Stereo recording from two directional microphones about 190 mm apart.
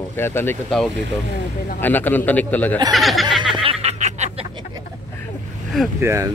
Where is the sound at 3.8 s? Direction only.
35° right (ahead or behind).